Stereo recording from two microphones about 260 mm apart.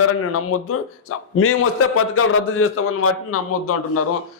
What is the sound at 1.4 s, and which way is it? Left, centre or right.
A man's voice, left.